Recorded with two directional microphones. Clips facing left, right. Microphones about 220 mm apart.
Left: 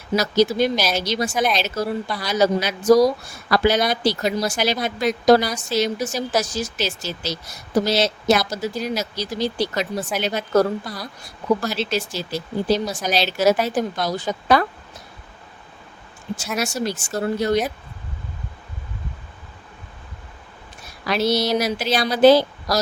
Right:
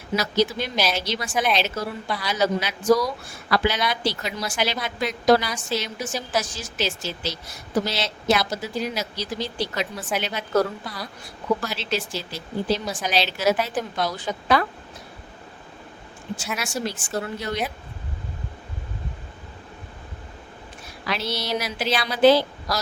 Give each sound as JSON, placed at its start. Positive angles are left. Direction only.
{"t": 0.2, "sound": "speech", "side_deg": 40}
{"t": 16.6, "sound": "speech", "side_deg": 40}
{"t": 21.1, "sound": "speech", "side_deg": 40}